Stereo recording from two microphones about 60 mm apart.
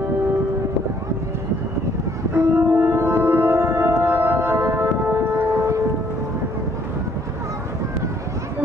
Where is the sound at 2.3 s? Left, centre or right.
Right.